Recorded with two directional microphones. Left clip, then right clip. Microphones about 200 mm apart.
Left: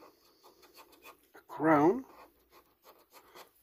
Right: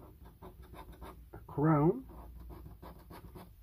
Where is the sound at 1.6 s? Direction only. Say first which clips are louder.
Left 5 dB; 50° left (ahead or behind).